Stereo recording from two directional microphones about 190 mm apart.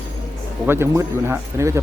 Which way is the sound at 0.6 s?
15° right (ahead or behind).